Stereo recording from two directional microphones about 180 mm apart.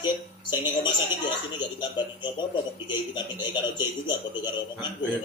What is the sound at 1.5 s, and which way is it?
Speech, 25° left (ahead or behind).